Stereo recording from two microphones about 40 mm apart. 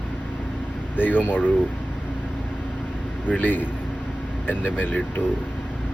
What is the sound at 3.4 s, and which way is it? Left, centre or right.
Speech, left.